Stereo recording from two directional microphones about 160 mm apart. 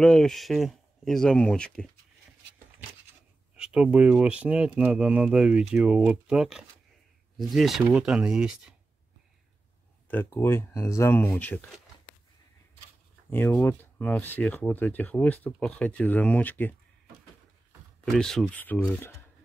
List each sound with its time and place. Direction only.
0.0 s speech: 5° left (ahead or behind)
3.5 s speech: 5° right (ahead or behind)
10.0 s speech: 10° left (ahead or behind)
13.3 s speech: 15° left (ahead or behind)
18.0 s speech: 5° left (ahead or behind)